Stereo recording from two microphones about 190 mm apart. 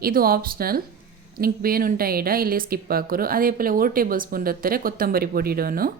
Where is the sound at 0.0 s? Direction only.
50° right (ahead or behind).